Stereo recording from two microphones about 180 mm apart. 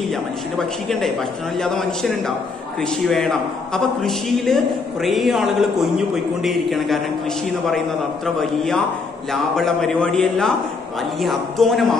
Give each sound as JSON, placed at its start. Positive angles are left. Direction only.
{"t": 0.6, "sound": "a man's voice", "side_deg": 0}
{"t": 8.4, "sound": "a man's voice", "side_deg": 0}